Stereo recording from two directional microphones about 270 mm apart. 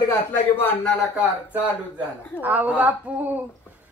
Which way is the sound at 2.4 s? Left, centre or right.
Centre.